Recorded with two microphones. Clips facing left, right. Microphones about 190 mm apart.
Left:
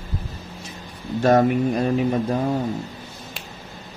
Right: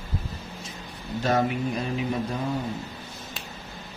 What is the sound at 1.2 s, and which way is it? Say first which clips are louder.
Mantra: left 8 dB; 45° left (ahead or behind).